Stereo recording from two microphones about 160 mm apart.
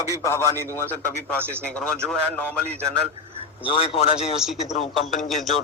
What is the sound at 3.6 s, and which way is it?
A man's voice, 35° left (ahead or behind).